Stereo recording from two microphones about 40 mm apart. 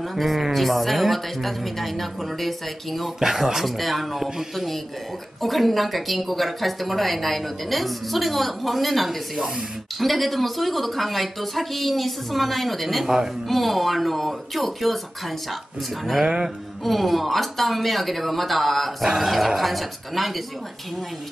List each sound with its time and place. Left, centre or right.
0.1 s a woman's voice: centre
3.2 s a woman's voice: centre
13.0 s speech: centre
13.5 s a woman's voice: centre
16.3 s music: centre
16.8 s a woman's voice: centre